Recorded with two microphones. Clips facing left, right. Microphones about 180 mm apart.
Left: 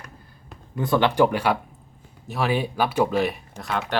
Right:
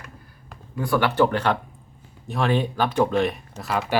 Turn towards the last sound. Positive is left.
turn(degrees=0)  # may be behind; listen again after turning